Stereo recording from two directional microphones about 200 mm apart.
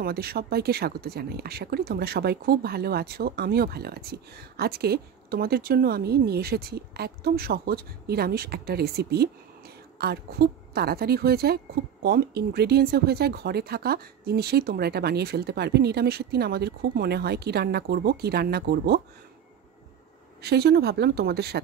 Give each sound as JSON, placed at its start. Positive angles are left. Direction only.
{"t": 0.0, "sound": "speech", "side_deg": -50}
{"t": 20.4, "sound": "speech", "side_deg": -55}